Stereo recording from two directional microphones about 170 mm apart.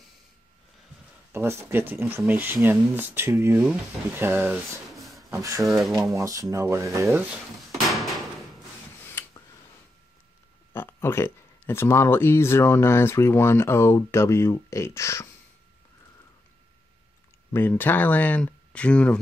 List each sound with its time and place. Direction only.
1.3 s speech: 15° right (ahead or behind)
4.8 s rub: centre (ahead or behind)
5.3 s speech: 20° right (ahead or behind)
5.7 s speech: centre (ahead or behind)
6.1 s speech: 20° right (ahead or behind)
7.7 s door: centre (ahead or behind)
9.2 s a sound: 15° left (ahead or behind)
10.7 s speech: 15° left (ahead or behind)
17.5 s speech: 15° left (ahead or behind)